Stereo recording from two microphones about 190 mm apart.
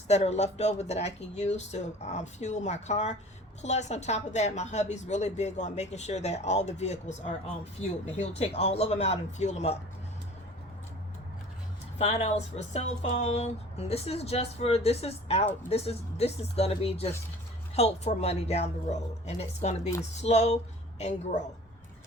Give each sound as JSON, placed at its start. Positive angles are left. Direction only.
{"t": 0.1, "sound": "speech", "side_deg": 35}
{"t": 11.9, "sound": "speech", "side_deg": 35}